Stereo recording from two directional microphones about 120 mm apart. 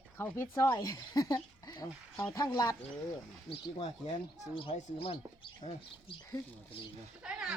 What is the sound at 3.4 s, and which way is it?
Speech, 65° left (ahead or behind).